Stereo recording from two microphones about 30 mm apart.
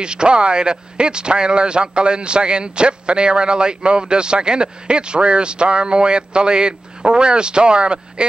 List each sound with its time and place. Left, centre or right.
0.0 s speech: right